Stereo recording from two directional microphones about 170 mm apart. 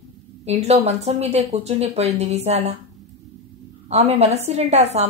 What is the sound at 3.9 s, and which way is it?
Speech, 40° right (ahead or behind).